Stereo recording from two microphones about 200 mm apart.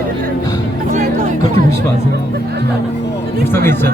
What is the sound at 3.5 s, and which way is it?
Speech, 10° left (ahead or behind).